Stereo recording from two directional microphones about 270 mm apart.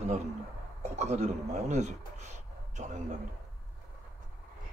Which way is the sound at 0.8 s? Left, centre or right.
Right.